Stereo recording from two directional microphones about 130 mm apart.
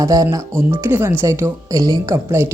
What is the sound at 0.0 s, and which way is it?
Speech, 25° right (ahead or behind).